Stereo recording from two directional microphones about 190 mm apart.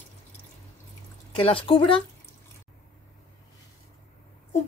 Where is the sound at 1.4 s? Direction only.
30° left (ahead or behind).